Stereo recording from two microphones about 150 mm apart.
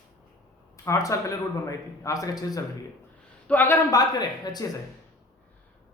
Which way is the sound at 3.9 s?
25° left (ahead or behind).